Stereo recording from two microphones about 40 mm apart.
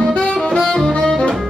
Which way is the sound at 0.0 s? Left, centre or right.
Left.